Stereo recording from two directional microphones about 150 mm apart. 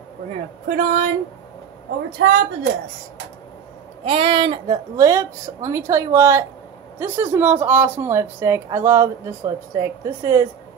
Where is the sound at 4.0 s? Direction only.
35° right (ahead or behind).